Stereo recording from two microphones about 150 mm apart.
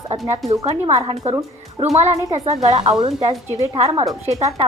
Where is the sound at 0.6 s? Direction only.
45° right (ahead or behind).